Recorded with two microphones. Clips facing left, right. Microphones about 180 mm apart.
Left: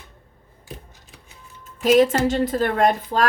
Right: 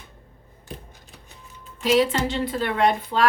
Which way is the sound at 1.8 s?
45° left (ahead or behind).